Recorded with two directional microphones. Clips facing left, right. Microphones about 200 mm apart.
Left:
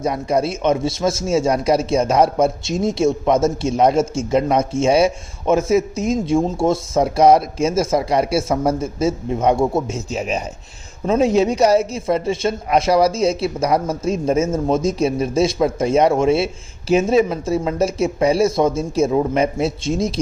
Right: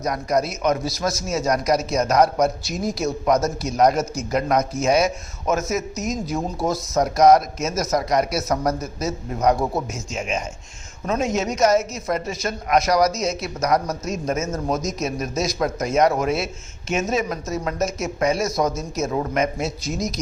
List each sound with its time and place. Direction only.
0.0 s a man's voice: 30° left (ahead or behind)